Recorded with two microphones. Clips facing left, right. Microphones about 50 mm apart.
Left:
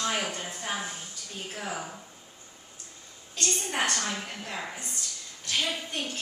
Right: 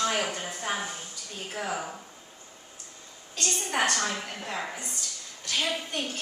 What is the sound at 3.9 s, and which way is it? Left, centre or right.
A man's voice, right.